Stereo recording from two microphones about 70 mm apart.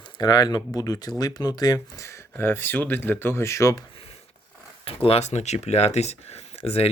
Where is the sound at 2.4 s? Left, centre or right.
Left.